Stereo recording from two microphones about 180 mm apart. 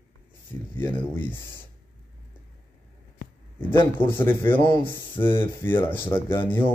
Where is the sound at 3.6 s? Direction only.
10° left (ahead or behind).